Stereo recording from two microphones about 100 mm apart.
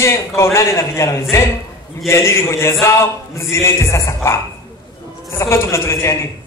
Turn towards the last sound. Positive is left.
turn(degrees=25)  # may be behind; listen again after turning